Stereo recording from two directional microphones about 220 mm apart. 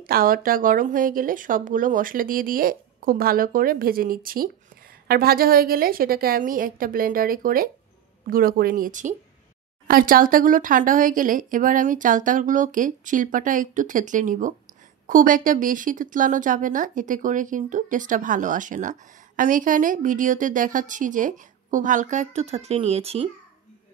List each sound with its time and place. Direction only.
0.0 s a woman's voice: 40° right (ahead or behind)